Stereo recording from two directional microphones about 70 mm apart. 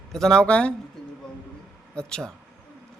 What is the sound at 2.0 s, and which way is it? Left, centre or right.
Speech, centre.